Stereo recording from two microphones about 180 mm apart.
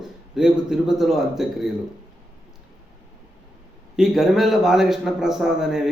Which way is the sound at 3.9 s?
Centre (ahead or behind).